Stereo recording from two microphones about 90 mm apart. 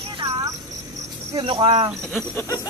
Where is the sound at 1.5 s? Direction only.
65° right (ahead or behind).